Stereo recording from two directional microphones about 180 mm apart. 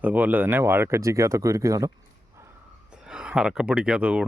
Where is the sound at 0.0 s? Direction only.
10° right (ahead or behind).